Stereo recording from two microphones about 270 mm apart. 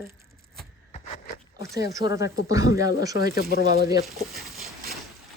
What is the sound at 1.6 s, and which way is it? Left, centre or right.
Speech, left.